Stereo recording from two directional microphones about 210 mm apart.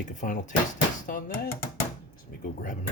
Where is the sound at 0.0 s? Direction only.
35° left (ahead or behind).